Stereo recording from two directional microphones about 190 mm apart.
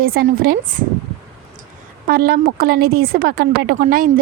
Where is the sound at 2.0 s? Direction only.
55° right (ahead or behind).